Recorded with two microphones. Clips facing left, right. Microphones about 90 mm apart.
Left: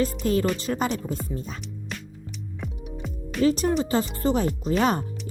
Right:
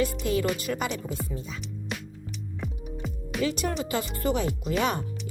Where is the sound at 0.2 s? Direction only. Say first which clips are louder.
Left 3 dB; 40° left (ahead or behind).